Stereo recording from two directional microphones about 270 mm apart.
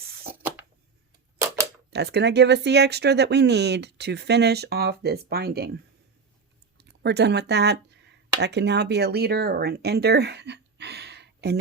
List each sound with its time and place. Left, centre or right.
0.3 s a sound: centre
1.9 s speech: right
6.7 s speech: right